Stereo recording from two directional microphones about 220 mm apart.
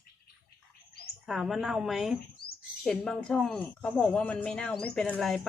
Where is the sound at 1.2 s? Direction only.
Centre (ahead or behind).